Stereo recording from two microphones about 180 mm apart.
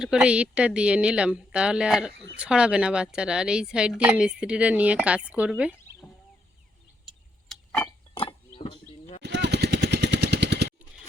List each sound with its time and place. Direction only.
0.0 s a woman's voice: 5° right (ahead or behind)
7.0 s vehicle: centre (ahead or behind)
8.5 s a sound: 30° left (ahead or behind)
9.2 s vehicle: 70° right (ahead or behind)